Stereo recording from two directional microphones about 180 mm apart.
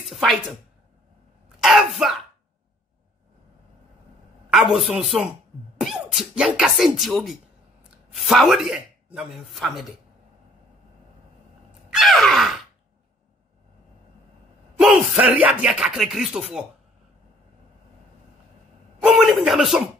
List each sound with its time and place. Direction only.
0.1 s a woman's voice: centre (ahead or behind)
1.6 s throat clearing: centre (ahead or behind)
4.5 s speech: centre (ahead or behind)
11.9 s a sound: centre (ahead or behind)
14.8 s speech: 5° right (ahead or behind)
18.9 s a sound: 5° right (ahead or behind)